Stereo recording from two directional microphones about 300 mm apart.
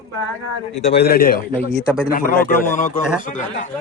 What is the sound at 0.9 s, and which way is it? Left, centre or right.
Speech, left.